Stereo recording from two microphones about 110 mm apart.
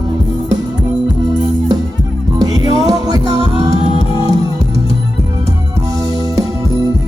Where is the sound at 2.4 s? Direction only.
35° right (ahead or behind).